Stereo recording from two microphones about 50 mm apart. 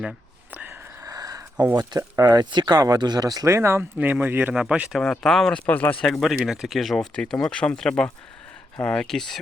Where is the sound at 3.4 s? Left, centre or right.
Right.